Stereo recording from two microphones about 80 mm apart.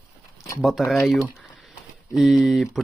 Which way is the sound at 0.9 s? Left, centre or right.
Centre.